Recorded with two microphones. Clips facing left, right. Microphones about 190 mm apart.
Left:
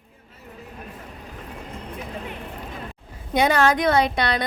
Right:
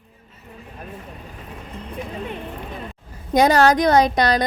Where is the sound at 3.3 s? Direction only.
40° right (ahead or behind).